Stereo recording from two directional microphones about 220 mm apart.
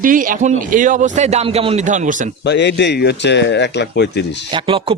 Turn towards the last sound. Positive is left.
turn(degrees=-25)  # may be behind; listen again after turning